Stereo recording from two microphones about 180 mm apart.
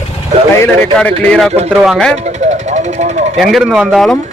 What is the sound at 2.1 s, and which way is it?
Vehicle, 40° right (ahead or behind).